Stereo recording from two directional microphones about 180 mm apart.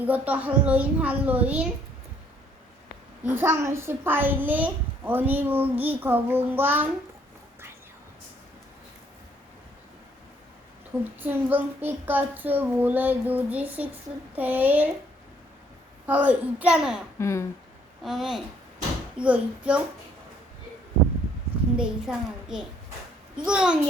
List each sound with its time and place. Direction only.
0.0 s a child's voice: 10° right (ahead or behind)
3.2 s a child's voice: 15° right (ahead or behind)
11.2 s a child's voice: 10° right (ahead or behind)
16.0 s a child's voice: 10° right (ahead or behind)
17.2 s speech: 15° left (ahead or behind)
18.0 s a child's voice: centre (ahead or behind)
21.8 s a child's voice: 5° right (ahead or behind)